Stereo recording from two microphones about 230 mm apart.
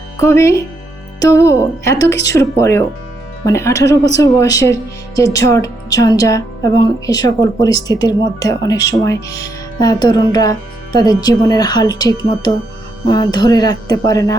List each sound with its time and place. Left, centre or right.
0.2 s speech: centre